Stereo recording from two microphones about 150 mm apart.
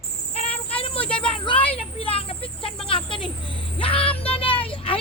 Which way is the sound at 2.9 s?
35° left (ahead or behind).